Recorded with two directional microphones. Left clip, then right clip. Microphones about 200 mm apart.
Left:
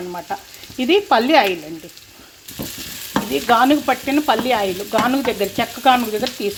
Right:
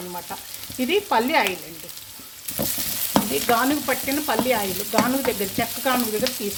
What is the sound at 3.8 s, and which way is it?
Stir, 15° left (ahead or behind).